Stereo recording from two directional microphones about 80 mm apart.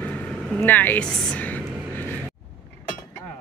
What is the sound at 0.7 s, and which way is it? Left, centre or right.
Speech, left.